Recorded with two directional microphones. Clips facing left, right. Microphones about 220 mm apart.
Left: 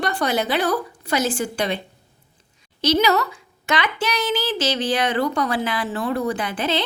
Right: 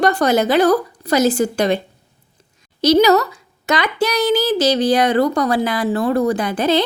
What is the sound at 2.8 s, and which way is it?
A woman's voice, 40° right (ahead or behind).